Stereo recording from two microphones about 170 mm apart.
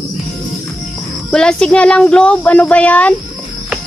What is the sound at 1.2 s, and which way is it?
Speech, 5° left (ahead or behind).